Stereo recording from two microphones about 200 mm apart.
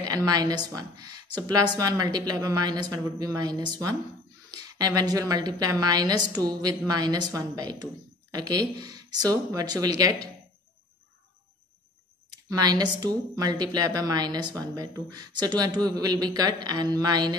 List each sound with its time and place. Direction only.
0.0 s a woman's voice: 20° right (ahead or behind)
12.4 s a woman's voice: 20° right (ahead or behind)